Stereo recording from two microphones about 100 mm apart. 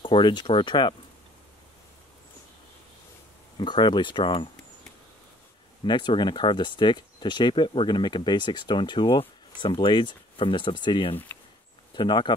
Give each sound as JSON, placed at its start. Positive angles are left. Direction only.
{"t": 0.0, "sound": "speech", "side_deg": 55}
{"t": 3.5, "sound": "speech", "side_deg": 50}
{"t": 5.9, "sound": "speech", "side_deg": 50}